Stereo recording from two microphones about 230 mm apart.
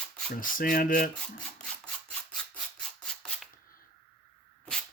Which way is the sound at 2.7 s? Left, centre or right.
Centre.